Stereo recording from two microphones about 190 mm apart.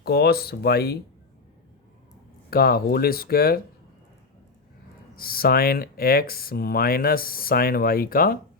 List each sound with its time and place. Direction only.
0.0 s speech: 55° left (ahead or behind)
2.5 s speech: 50° left (ahead or behind)
5.1 s speech: 50° left (ahead or behind)